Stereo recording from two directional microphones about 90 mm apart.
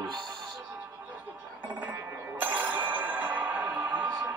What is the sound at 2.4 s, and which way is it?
Bicycle bell, 20° right (ahead or behind).